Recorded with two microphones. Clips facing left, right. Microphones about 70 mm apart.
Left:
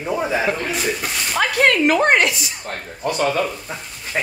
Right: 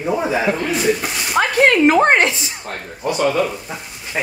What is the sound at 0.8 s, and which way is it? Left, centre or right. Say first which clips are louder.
Speech: right 4 dB; centre.